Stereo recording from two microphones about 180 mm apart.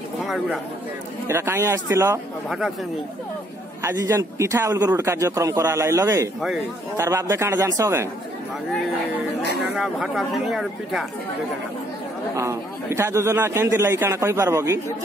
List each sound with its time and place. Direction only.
0.2 s a man's voice: centre (ahead or behind)
1.2 s speech: 15° right (ahead or behind)
3.8 s speech: 15° right (ahead or behind)
9.8 s speech: 5° right (ahead or behind)
12.4 s speech: 15° right (ahead or behind)